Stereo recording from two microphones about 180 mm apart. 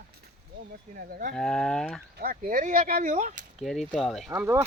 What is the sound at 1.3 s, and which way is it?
Speech, 5° left (ahead or behind).